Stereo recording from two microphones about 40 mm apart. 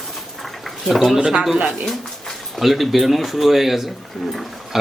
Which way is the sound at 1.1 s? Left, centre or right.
Centre.